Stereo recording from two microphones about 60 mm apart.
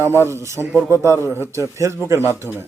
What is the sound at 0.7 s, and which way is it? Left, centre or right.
Speech, right.